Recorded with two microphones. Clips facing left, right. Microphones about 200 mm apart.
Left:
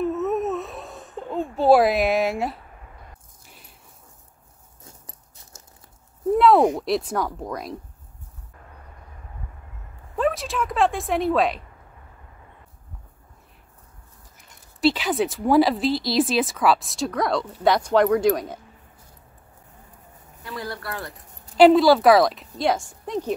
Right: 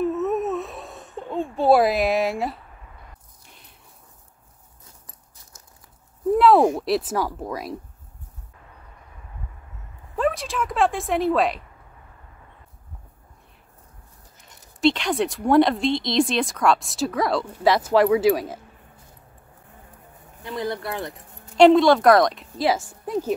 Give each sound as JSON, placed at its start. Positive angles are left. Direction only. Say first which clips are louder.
{"t": 0.0, "sound": "a sound", "louder": "right 1 dB", "side_deg": 0}
{"t": 6.3, "sound": "a sound", "louder": "even", "side_deg": 0}
{"t": 6.8, "sound": "speech", "louder": "right 1 dB", "side_deg": 0}
{"t": 10.1, "sound": "speech", "louder": "even", "side_deg": 0}
{"t": 14.8, "sound": "speech", "louder": "even", "side_deg": 5}
{"t": 20.4, "sound": "speech", "louder": "right 5 dB", "side_deg": -20}
{"t": 21.5, "sound": "speech", "louder": "even", "side_deg": 5}